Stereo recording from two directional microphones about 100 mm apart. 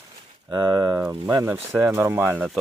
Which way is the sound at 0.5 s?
40° right (ahead or behind).